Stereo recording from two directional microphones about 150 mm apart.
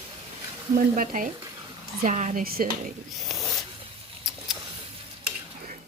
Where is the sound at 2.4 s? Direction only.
80° right.